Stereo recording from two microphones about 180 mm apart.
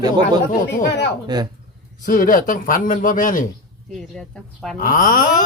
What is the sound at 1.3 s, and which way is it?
Speech, 25° right (ahead or behind).